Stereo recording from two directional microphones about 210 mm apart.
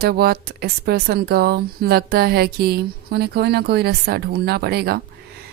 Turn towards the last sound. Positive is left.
turn(degrees=-50)  # may be behind; listen again after turning